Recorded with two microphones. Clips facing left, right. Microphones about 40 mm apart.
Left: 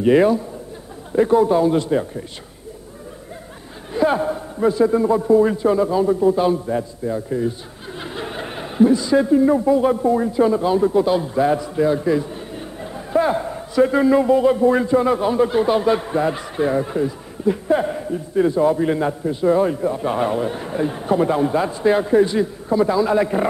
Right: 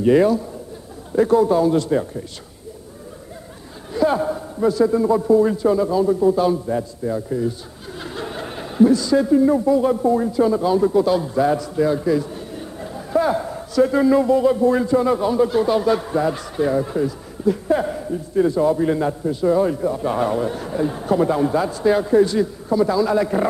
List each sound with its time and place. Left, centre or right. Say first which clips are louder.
0.0 s speech: left 1 dB; left
3.9 s speech: even; left
7.1 s speech: even; centre
8.0 s speech: even; left